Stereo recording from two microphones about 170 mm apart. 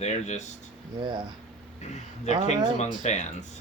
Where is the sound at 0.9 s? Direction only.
30° right (ahead or behind).